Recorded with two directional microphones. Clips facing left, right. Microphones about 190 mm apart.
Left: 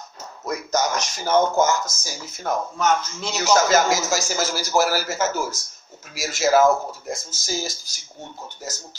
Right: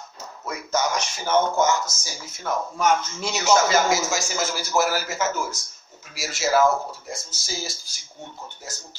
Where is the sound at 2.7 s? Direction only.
10° right (ahead or behind).